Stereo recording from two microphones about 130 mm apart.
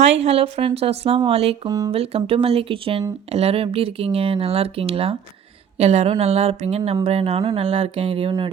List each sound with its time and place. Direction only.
0.2 s speech: 50° right (ahead or behind)
1.6 s speech: 30° right (ahead or behind)
1.9 s speech: 50° right (ahead or behind)